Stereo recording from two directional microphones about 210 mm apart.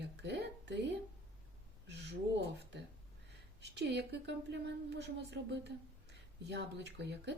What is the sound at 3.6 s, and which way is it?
Speech, 55° right (ahead or behind).